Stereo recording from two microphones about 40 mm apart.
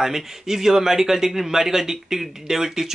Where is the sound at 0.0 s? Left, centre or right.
Centre.